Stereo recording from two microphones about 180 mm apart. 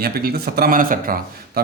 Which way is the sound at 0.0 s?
60° right (ahead or behind).